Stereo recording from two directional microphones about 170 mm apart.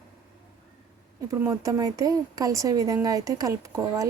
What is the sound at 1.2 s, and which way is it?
Speech, 20° right (ahead or behind).